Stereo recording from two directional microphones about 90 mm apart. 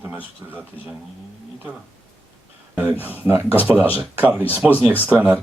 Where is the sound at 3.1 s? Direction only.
20° right (ahead or behind).